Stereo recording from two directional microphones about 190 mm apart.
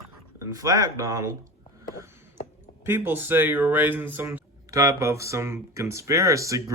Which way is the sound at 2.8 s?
10° right (ahead or behind).